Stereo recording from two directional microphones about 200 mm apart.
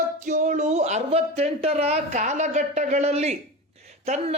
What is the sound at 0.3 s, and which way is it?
A man's voice, 35° right (ahead or behind).